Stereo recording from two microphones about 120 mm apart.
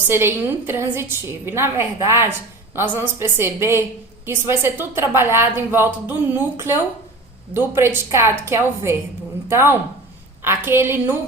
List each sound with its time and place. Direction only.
0.1 s a woman's voice: 20° right (ahead or behind)